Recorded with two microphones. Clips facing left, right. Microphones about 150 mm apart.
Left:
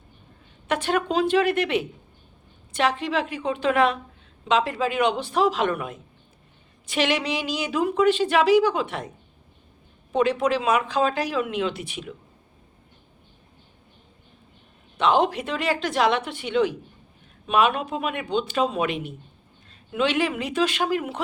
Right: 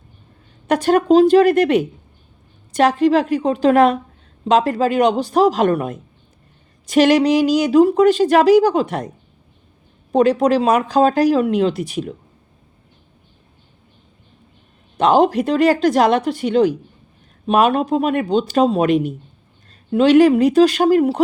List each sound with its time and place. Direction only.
0.7 s a woman's voice: 40° right (ahead or behind)
14.9 s a woman's voice: 40° right (ahead or behind)